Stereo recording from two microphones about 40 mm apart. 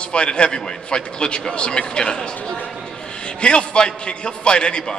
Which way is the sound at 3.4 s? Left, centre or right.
Left.